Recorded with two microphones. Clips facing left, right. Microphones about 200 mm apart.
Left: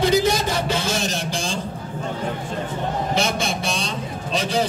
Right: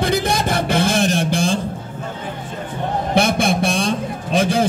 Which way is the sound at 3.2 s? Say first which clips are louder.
Right 10 dB; 55° right (ahead or behind).